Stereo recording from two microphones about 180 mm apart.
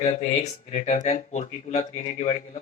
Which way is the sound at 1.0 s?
40° left (ahead or behind).